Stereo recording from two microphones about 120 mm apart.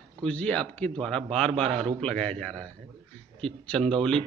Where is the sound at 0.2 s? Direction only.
10° left (ahead or behind).